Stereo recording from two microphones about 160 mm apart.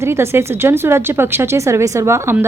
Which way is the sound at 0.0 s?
15° right (ahead or behind).